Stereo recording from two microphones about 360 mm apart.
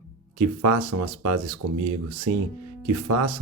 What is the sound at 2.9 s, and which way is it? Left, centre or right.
Speech, right.